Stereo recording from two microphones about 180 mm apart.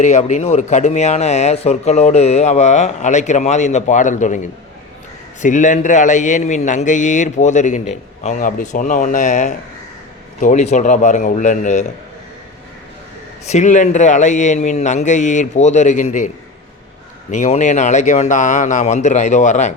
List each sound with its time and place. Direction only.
0.0 s a man's voice: 40° left (ahead or behind)
13.5 s speech: 40° left (ahead or behind)
17.3 s speech: 40° left (ahead or behind)